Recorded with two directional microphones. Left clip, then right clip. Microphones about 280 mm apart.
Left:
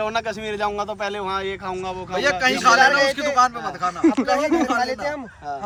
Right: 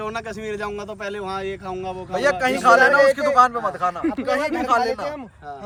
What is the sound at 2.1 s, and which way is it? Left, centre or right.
Speech, right.